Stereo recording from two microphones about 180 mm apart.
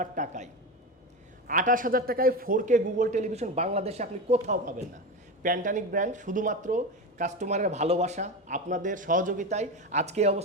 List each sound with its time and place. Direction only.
0.0 s speech: 45° right (ahead or behind)